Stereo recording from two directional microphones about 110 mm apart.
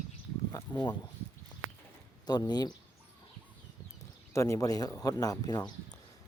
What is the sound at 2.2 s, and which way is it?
Speech, 40° left (ahead or behind).